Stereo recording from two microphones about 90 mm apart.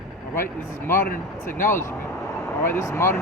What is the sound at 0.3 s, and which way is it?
Speech, 25° left (ahead or behind).